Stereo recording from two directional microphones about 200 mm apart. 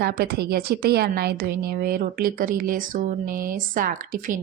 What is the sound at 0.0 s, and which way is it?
A woman's voice, 50° right (ahead or behind).